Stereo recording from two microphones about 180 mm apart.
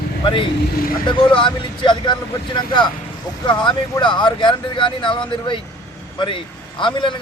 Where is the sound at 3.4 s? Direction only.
25° left (ahead or behind).